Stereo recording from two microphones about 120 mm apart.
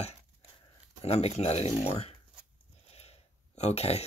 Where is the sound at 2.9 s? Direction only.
60° left (ahead or behind).